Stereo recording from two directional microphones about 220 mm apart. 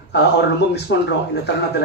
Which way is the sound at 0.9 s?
50° left (ahead or behind).